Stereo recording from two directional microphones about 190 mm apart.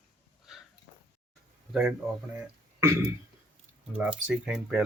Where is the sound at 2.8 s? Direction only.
15° right (ahead or behind).